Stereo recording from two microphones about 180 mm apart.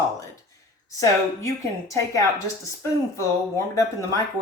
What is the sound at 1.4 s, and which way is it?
Speech, 15° left (ahead or behind).